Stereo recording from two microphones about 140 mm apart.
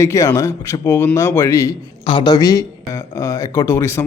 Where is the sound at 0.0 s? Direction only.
20° left (ahead or behind).